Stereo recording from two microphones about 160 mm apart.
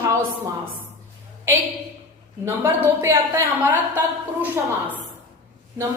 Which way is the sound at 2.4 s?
15° right (ahead or behind).